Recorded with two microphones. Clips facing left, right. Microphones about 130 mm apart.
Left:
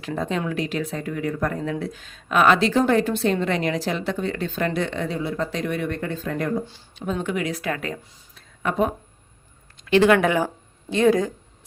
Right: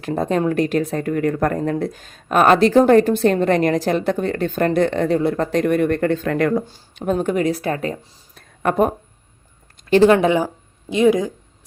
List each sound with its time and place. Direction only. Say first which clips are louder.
0.1 s speech: right 7 dB; 45° right (ahead or behind); by 6.7 s 70° right (ahead or behind)
6.9 s speech: right 7 dB; 55° right (ahead or behind); by 7.9 s 35° right (ahead or behind)
8.4 s a sound: right 5 dB; 50° right (ahead or behind)
9.8 s speech: right 4 dB; 35° right (ahead or behind)
10.2 s speech: right 4 dB; 20° right (ahead or behind)